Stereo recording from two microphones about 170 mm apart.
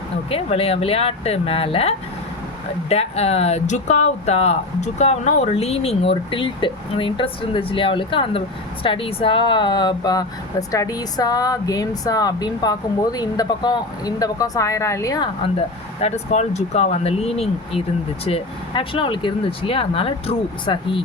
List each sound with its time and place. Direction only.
0.3 s speech: 35° left (ahead or behind); by 15.3 s 20° left (ahead or behind)
16.0 s speech: 40° left (ahead or behind)